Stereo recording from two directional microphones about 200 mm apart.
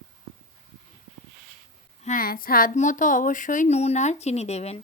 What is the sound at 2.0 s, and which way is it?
Speech, 45° left (ahead or behind).